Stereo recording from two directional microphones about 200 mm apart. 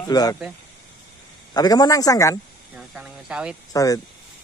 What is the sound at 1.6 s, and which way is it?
Speech, 20° left (ahead or behind).